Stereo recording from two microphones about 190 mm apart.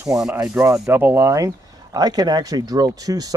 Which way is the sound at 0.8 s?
10° right (ahead or behind).